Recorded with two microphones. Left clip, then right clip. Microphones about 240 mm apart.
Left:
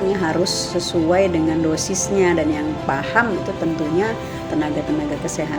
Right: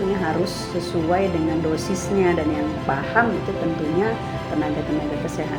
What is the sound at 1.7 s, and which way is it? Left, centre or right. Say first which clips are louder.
Speech: left 3 dB; left.